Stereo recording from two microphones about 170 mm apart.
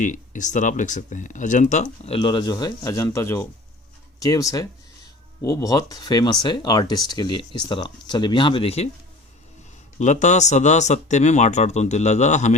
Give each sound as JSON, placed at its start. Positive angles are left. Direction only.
{"t": 0.0, "sound": "speech", "side_deg": 45}
{"t": 10.0, "sound": "speech", "side_deg": 45}